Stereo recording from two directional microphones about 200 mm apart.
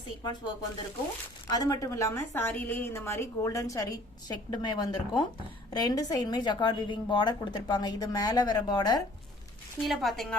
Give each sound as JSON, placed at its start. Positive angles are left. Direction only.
{"t": 0.2, "sound": "a woman's voice", "side_deg": 20}
{"t": 9.8, "sound": "speech", "side_deg": 0}